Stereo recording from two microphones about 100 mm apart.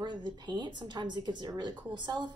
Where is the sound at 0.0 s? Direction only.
50° right (ahead or behind).